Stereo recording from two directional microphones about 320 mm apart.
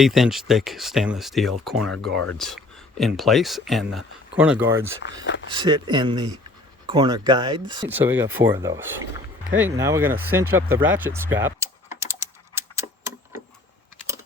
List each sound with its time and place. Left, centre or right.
0.0 s speech: centre
5.3 s speech: left
5.9 s speech: centre
10.8 s typing: centre